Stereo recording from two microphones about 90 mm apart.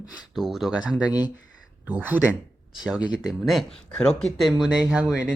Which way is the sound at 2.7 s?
5° right (ahead or behind).